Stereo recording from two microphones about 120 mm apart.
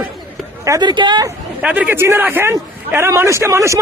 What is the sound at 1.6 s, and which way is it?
Speech, 10° right (ahead or behind).